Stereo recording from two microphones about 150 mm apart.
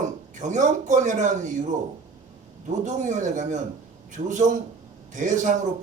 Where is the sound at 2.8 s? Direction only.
55° right (ahead or behind).